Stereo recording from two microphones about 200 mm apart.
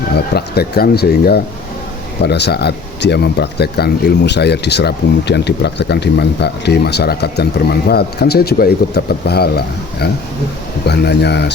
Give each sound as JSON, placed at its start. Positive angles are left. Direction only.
{"t": 0.3, "sound": "speech", "side_deg": 50}